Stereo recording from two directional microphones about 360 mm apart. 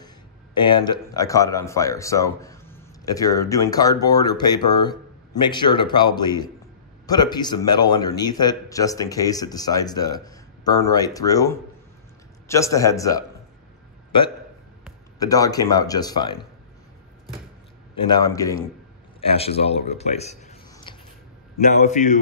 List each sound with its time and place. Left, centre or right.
0.6 s a man's voice: centre
15.1 s a man's voice: centre
18.0 s a man's voice: centre